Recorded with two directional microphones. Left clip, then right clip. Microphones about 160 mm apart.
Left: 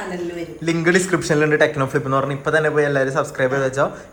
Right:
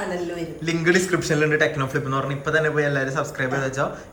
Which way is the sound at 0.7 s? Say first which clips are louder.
Left 3 dB; 10° right (ahead or behind).